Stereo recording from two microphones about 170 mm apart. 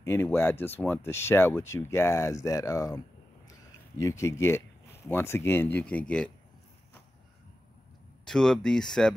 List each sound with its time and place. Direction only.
0.0 s speech: 15° left (ahead or behind)
4.0 s speech: 15° left (ahead or behind)
8.3 s speech: 5° left (ahead or behind)